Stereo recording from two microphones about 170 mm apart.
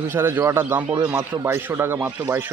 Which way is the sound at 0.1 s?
15° right (ahead or behind).